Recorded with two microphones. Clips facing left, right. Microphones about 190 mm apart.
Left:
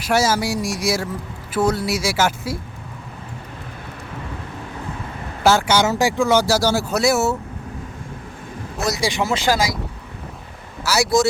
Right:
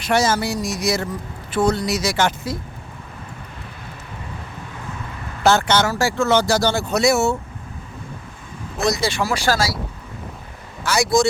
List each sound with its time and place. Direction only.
0.0 s speech: 10° left (ahead or behind)
5.4 s speech: 10° left (ahead or behind)
8.8 s speech: 10° left (ahead or behind)
10.8 s speech: 5° left (ahead or behind)